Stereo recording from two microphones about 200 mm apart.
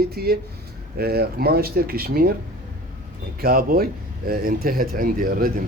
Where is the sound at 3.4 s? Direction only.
45° right (ahead or behind).